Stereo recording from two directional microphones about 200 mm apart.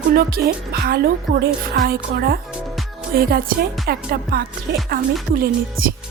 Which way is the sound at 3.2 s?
50° right (ahead or behind).